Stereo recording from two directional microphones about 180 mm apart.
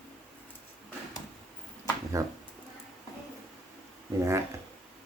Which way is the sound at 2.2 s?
20° right (ahead or behind).